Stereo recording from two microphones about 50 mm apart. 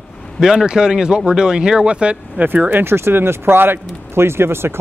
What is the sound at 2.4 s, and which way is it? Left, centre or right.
Speech, right.